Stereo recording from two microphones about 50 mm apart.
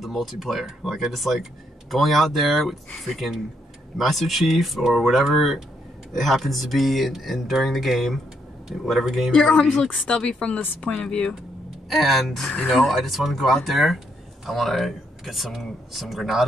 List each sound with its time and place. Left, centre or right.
0.0 s speech: centre
9.3 s speech: centre
10.0 s speech: left
11.9 s speech: centre